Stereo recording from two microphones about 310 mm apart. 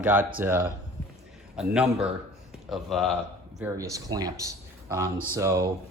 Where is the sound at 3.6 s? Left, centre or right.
Centre.